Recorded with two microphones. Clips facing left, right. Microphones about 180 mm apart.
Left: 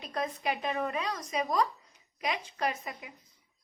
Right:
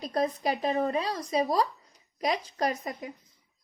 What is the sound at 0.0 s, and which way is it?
A woman's voice, 35° right (ahead or behind).